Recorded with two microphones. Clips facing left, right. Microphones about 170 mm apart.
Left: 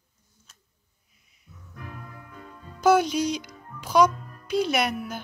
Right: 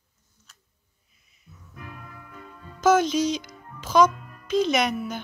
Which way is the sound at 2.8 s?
10° left (ahead or behind).